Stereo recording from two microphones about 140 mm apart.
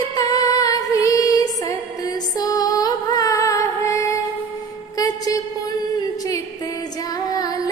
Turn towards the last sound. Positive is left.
turn(degrees=25)  # may be behind; listen again after turning